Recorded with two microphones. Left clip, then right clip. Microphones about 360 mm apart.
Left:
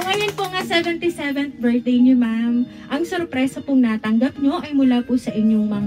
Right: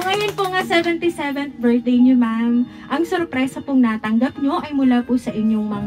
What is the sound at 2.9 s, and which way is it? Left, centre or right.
A woman's voice, right.